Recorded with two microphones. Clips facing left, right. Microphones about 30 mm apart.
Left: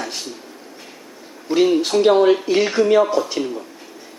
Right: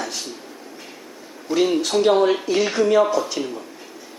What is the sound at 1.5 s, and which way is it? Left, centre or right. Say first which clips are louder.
A man's voice: left 3 dB; centre.